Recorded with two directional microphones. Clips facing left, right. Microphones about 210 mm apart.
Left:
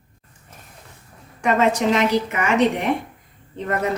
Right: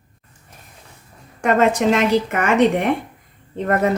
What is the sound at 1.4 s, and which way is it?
A woman's voice, 50° right (ahead or behind).